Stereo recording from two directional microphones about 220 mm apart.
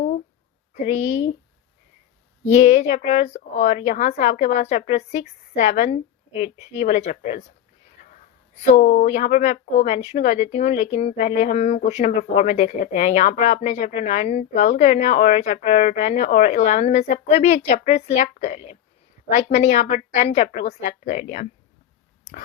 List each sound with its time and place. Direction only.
0.7 s a woman's voice: 35° left (ahead or behind)
2.4 s speech: 30° left (ahead or behind)
8.8 s speech: 35° left (ahead or behind)